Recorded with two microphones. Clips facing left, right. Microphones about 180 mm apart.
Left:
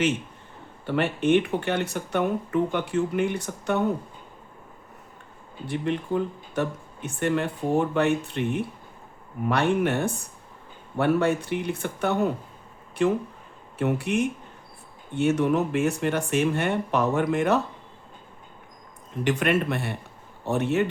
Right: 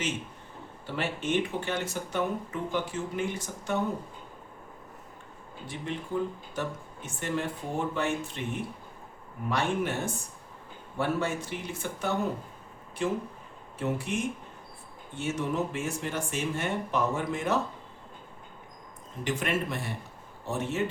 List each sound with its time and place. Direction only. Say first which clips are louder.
0.9 s speech: left 9 dB; 60° left (ahead or behind)
5.6 s speech: left 9 dB; 65° left (ahead or behind)
19.2 s speech: left 7 dB; 65° left (ahead or behind)